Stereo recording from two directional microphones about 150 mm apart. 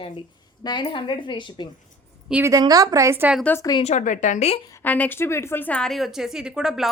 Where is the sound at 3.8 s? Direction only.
50° left (ahead or behind).